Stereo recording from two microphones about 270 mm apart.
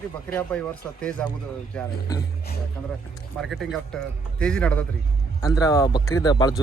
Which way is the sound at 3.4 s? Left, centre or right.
Centre.